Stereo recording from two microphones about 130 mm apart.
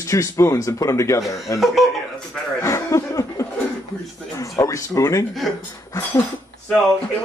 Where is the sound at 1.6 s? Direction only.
Centre (ahead or behind).